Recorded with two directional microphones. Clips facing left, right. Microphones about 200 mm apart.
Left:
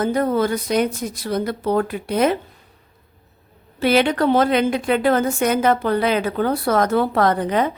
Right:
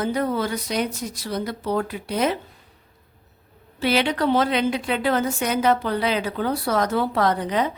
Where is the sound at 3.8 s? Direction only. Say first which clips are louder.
Left 4 dB; 50° left (ahead or behind).